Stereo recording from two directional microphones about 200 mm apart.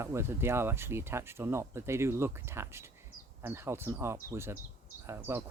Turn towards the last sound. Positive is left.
turn(degrees=-10)  # may be behind; listen again after turning